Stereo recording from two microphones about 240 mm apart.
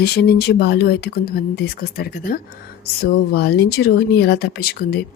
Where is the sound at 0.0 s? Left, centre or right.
Left.